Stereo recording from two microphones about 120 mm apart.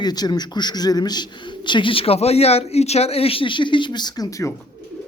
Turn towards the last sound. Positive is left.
turn(degrees=25)  # may be behind; listen again after turning